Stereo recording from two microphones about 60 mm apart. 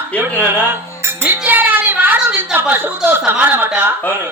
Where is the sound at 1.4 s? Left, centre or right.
Right.